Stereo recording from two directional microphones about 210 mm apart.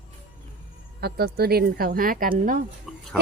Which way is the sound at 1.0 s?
50° right (ahead or behind).